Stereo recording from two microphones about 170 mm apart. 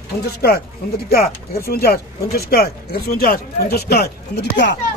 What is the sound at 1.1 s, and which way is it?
Speech, 65° left (ahead or behind).